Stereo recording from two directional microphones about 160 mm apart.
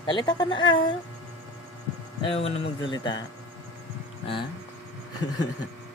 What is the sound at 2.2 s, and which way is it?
Speech, 35° left (ahead or behind).